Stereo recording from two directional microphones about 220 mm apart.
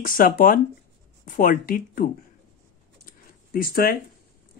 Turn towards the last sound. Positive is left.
turn(degrees=40)  # may be behind; listen again after turning